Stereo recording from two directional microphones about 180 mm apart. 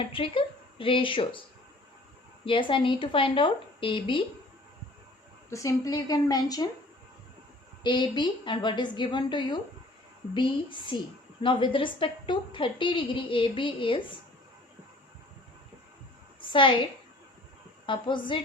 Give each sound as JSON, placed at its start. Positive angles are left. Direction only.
{"t": 0.0, "sound": "a woman's voice", "side_deg": 30}
{"t": 2.4, "sound": "a woman's voice", "side_deg": 30}
{"t": 5.5, "sound": "a woman's voice", "side_deg": 15}
{"t": 7.9, "sound": "a woman's voice", "side_deg": 25}
{"t": 16.4, "sound": "a woman's voice", "side_deg": 30}
{"t": 17.8, "sound": "a woman's voice", "side_deg": 25}